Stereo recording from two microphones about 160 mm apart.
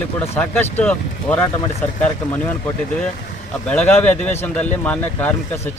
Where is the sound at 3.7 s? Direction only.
10° left (ahead or behind).